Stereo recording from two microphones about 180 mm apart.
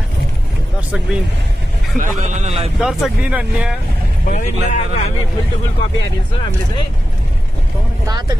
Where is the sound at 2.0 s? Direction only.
40° right (ahead or behind).